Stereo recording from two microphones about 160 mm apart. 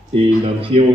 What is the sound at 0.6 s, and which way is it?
Speech, 35° right (ahead or behind).